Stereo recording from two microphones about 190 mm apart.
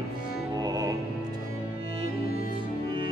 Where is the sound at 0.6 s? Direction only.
20° right (ahead or behind).